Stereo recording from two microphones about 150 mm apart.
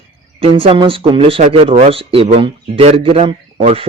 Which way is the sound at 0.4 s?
35° right (ahead or behind).